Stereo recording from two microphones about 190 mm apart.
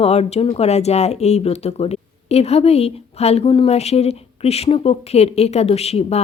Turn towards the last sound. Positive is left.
turn(degrees=35)  # may be behind; listen again after turning